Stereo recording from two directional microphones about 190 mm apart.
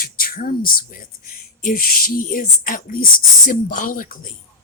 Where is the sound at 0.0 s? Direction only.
50° left (ahead or behind).